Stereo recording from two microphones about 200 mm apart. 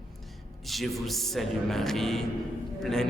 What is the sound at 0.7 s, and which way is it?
A man's voice, centre (ahead or behind).